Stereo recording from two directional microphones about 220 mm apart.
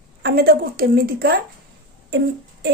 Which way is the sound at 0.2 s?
45° right (ahead or behind).